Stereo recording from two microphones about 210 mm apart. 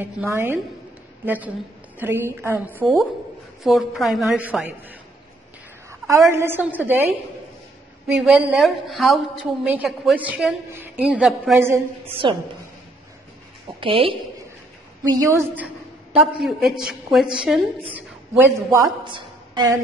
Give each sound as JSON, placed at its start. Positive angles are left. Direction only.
{"t": 0.0, "sound": "a woman's voice", "side_deg": -10}
{"t": 8.2, "sound": "a woman's voice", "side_deg": 0}
{"t": 12.1, "sound": "a woman's voice", "side_deg": -25}
{"t": 13.7, "sound": "a woman's voice", "side_deg": -25}
{"t": 15.2, "sound": "a woman's voice", "side_deg": -10}
{"t": 17.9, "sound": "a woman's voice", "side_deg": -15}